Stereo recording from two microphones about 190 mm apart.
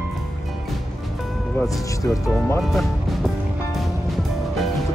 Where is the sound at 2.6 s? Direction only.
Centre (ahead or behind).